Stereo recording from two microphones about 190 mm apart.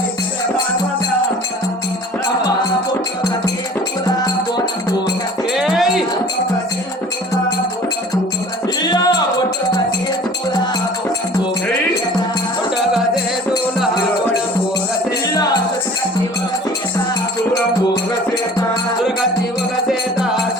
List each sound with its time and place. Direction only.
4.0 s music: 20° left (ahead or behind)
5.5 s music: centre (ahead or behind)
8.8 s music: 20° left (ahead or behind)